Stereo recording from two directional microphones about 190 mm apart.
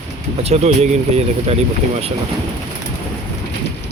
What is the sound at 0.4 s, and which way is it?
Speech, 35° right (ahead or behind).